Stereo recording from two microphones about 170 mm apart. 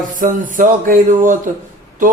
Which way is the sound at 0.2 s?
50° right (ahead or behind).